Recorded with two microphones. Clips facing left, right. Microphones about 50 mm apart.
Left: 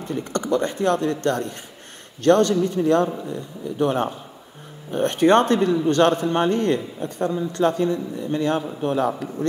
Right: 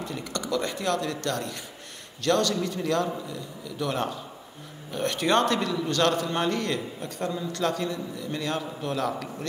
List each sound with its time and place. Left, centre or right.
0.0 s a man's voice: left